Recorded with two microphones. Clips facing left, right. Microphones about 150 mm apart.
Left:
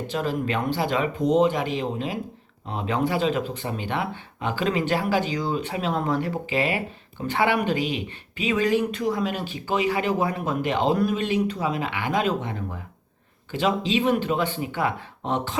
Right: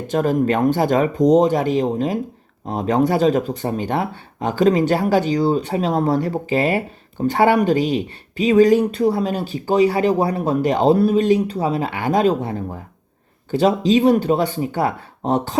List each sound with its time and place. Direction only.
0.1 s speech: 45° right (ahead or behind)